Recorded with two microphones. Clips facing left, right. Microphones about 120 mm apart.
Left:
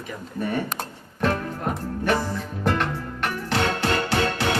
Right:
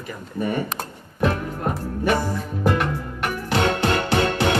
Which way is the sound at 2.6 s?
10° right (ahead or behind).